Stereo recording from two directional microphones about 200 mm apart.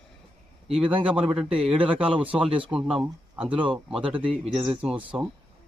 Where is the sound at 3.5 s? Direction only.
25° right (ahead or behind).